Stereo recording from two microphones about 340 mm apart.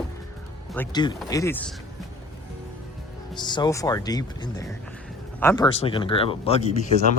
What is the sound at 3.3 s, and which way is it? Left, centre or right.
Speech, centre.